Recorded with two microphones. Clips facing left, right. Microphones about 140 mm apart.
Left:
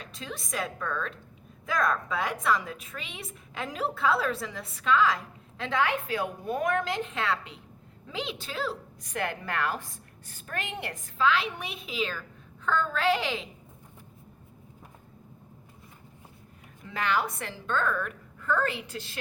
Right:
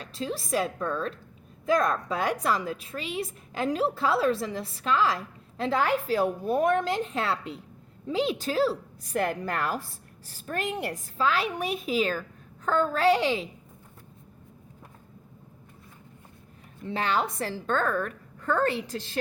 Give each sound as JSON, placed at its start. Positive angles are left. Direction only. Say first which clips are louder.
{"t": 0.0, "sound": "a woman's voice", "louder": "right 7 dB", "side_deg": -30}
{"t": 16.8, "sound": "a woman's voice", "louder": "right 2 dB", "side_deg": -30}